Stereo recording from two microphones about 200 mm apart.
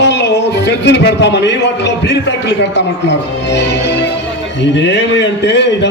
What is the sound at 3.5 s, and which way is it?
Music, 60° left (ahead or behind).